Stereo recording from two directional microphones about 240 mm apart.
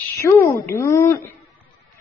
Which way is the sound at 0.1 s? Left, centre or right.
Centre.